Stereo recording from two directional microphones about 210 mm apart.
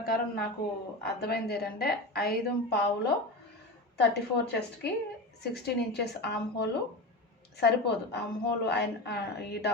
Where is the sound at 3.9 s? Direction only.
50° left (ahead or behind).